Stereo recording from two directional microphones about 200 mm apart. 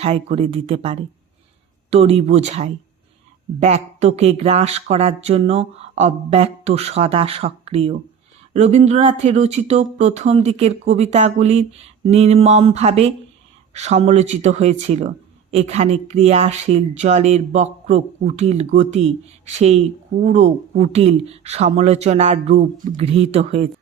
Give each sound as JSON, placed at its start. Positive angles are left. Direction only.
{"t": 0.0, "sound": "speech", "side_deg": -30}